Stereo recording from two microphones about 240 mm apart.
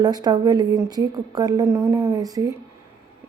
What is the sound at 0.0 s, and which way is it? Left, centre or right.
A woman's voice, centre.